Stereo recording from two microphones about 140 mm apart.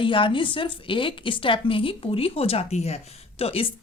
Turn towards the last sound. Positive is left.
turn(degrees=45)  # may be behind; listen again after turning